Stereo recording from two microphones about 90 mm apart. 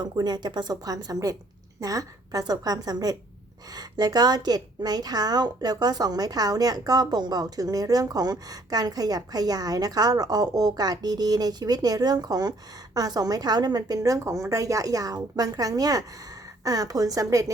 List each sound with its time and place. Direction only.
0.0 s a woman's voice: 50° right (ahead or behind)